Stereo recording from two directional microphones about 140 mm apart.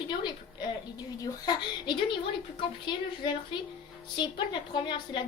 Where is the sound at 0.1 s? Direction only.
35° left (ahead or behind).